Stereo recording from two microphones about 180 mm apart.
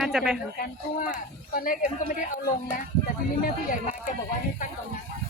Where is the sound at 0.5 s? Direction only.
55° left (ahead or behind).